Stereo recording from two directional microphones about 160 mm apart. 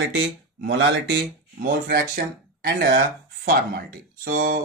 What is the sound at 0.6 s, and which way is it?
Speech, 90° right.